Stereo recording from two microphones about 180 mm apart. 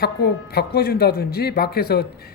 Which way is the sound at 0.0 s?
60° left (ahead or behind).